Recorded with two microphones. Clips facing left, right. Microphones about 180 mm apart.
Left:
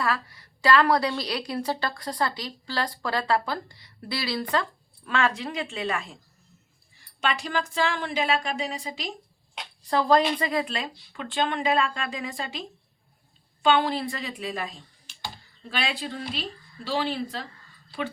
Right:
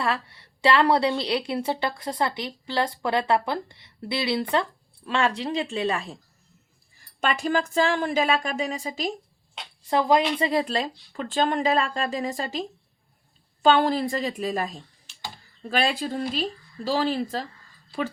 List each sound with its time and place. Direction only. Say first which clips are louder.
0.0 s a woman's voice: right 1 dB; 25° right (ahead or behind)
7.2 s speech: right 4 dB; 50° right (ahead or behind)
9.9 s speech: even; 15° right (ahead or behind)
10.3 s speech: right 4 dB; 30° right (ahead or behind)